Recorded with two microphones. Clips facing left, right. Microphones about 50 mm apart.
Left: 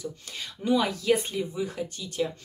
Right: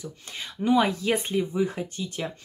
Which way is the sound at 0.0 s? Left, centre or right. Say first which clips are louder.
Left 1 dB; right.